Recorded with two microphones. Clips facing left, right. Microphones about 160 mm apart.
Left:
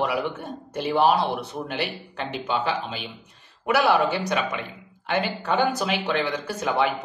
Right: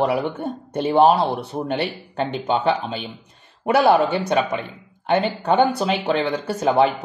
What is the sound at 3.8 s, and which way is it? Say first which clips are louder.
Speech: right 5 dB; 35° right (ahead or behind).